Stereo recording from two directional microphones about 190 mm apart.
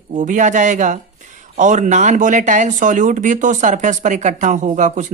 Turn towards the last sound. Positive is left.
turn(degrees=-40)  # may be behind; listen again after turning